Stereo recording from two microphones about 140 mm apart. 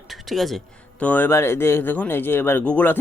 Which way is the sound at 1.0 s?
15° left (ahead or behind).